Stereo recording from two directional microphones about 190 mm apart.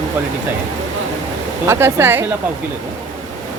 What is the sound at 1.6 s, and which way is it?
Speech, 10° right (ahead or behind).